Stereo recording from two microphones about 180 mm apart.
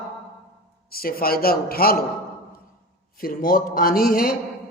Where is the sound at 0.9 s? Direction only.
55° left (ahead or behind).